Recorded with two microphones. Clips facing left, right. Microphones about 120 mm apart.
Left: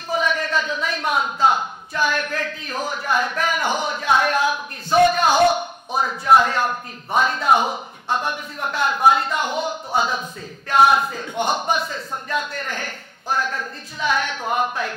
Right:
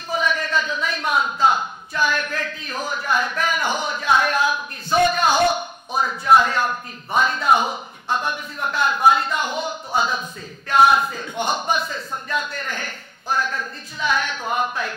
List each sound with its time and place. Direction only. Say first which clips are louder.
0.1 s a man's voice: left 1 dB; 55° left (ahead or behind)
5.5 s a sound: left 2 dB; 60° left (ahead or behind)
6.4 s a man's voice: left 1 dB; 50° left (ahead or behind)